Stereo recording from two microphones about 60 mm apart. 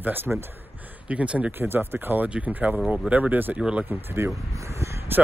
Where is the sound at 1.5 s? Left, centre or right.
Right.